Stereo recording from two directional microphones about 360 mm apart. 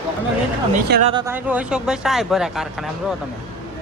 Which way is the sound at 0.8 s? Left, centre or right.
Right.